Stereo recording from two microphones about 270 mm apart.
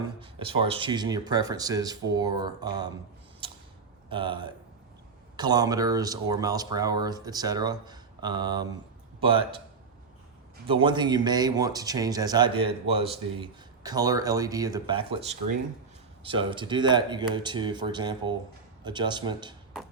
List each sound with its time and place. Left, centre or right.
0.2 s speech: centre
4.1 s a man's voice: centre
10.7 s speech: centre
16.2 s speech: centre